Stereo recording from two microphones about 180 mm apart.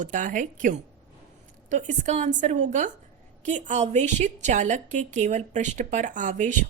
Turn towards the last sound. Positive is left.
turn(degrees=-45)  # may be behind; listen again after turning